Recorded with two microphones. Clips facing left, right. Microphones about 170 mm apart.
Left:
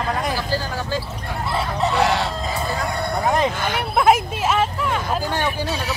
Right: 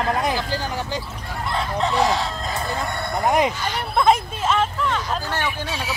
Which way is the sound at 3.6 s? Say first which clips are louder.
Left 3 dB; 55° left (ahead or behind).